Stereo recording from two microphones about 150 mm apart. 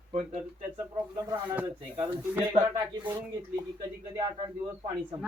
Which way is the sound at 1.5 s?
15° right (ahead or behind).